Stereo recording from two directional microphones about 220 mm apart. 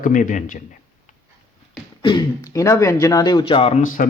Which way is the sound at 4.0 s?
40° left (ahead or behind).